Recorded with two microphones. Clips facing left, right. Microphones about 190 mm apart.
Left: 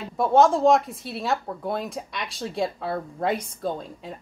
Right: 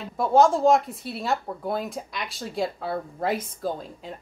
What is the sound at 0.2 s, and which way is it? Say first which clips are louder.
Speech: left 1 dB; centre (ahead or behind).